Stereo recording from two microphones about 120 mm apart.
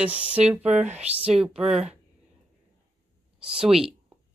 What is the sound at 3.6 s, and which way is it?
Speech, 5° right (ahead or behind).